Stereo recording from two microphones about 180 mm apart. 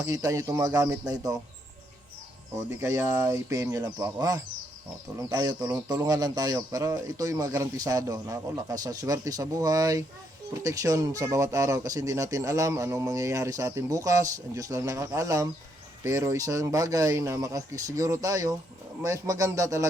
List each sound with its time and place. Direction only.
0.0 s speech: 20° right (ahead or behind)
2.6 s speech: 15° right (ahead or behind)